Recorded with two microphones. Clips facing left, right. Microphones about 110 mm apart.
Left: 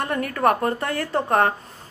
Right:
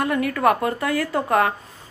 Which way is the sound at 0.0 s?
40° left (ahead or behind).